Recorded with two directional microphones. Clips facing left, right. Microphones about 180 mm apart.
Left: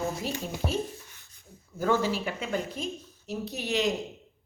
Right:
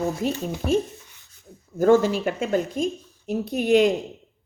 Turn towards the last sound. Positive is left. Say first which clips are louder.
# right 11 dB
turn(degrees=-55)  # may be behind; listen again after turning